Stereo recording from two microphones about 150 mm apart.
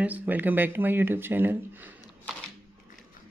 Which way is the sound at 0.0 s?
10° right (ahead or behind).